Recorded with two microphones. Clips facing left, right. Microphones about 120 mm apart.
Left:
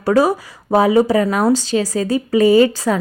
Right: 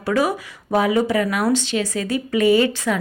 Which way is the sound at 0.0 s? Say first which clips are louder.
Left 5 dB; 40° left (ahead or behind).